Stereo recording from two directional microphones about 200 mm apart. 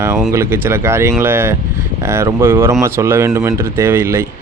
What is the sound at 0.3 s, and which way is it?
Speech, 15° right (ahead or behind).